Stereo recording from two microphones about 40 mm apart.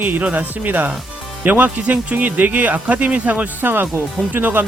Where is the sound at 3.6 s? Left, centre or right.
Right.